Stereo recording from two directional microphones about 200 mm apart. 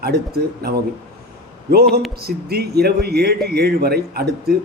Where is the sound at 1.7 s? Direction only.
50° right (ahead or behind).